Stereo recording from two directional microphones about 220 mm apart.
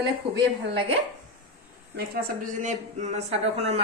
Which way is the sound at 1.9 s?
40° right (ahead or behind).